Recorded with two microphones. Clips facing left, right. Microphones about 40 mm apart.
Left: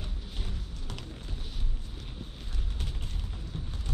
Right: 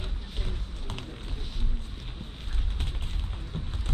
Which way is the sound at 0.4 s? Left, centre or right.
Right.